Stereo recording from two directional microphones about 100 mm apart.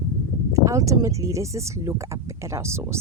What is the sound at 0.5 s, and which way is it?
Speech, 30° right (ahead or behind).